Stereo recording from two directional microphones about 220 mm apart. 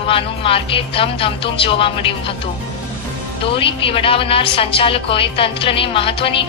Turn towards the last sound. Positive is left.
turn(degrees=25)  # may be behind; listen again after turning